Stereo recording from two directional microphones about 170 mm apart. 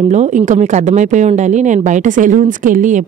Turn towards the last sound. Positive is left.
turn(degrees=-50)  # may be behind; listen again after turning